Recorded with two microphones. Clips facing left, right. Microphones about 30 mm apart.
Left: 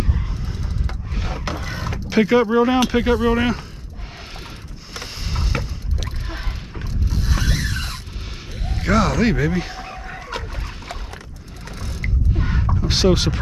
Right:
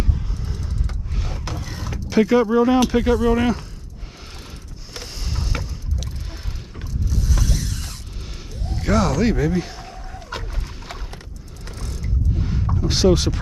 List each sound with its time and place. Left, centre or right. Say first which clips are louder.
0.0 s a sound: left 1 dB; left
4.9 s vehicle: left 2 dB; left
6.2 s mechanisms: left 5 dB; left
8.8 s speech: left 1 dB; centre
10.3 s boat: left 1 dB; centre
12.4 s a sound: left 4 dB; left
12.8 s speech: right 1 dB; centre